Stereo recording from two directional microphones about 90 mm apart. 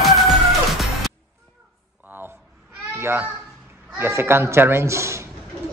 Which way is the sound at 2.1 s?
25° right (ahead or behind).